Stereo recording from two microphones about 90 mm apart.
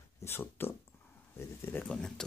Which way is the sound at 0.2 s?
25° left (ahead or behind).